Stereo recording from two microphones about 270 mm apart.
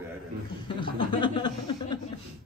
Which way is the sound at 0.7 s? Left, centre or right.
Centre.